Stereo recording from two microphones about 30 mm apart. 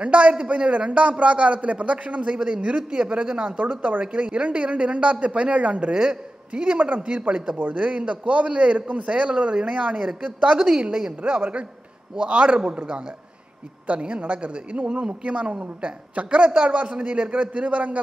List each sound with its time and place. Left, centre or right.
0.0 s a man's voice: right
2.4 s a woman's voice: right
3.4 s speech: right
4.1 s a man's voice: right
5.9 s a man's voice: right
6.6 s a man's voice: right
7.0 s a woman's voice: right
7.2 s a man's voice: right
7.5 s a man's voice: right
10.9 s a woman's voice: right
11.2 s a woman's voice: right
12.7 s a man's voice: right
17.3 s speech: right